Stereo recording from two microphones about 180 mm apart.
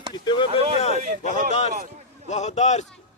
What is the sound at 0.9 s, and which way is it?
Speech, 45° right (ahead or behind).